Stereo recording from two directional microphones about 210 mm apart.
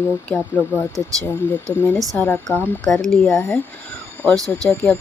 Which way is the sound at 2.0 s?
5° left (ahead or behind).